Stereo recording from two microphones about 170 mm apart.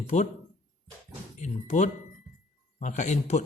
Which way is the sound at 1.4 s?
45° left (ahead or behind).